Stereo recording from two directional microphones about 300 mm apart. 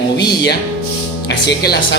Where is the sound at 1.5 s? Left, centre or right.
Left.